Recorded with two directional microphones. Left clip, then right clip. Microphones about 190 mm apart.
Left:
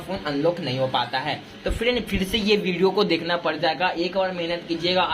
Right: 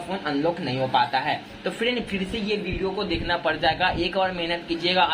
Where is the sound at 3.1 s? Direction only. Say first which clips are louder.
Left 1 dB; 25° left (ahead or behind).